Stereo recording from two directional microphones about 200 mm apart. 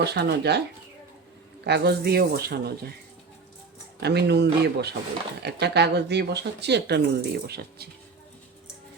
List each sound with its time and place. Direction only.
0.0 s speech: 55° right (ahead or behind)
1.6 s a man's voice: 55° right (ahead or behind)
4.0 s speech: 55° right (ahead or behind)